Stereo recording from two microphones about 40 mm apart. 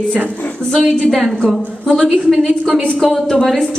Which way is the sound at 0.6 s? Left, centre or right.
Right.